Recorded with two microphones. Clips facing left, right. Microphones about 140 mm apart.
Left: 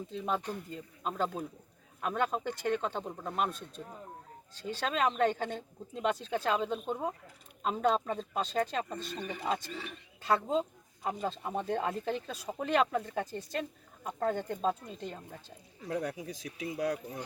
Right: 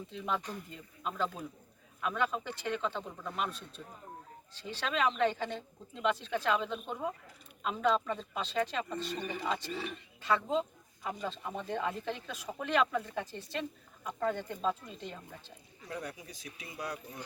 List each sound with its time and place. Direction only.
0.1 s speech: 35° left (ahead or behind)
16.0 s speech: 90° left